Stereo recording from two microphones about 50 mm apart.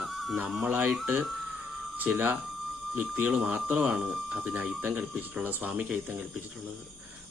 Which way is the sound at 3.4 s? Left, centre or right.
Right.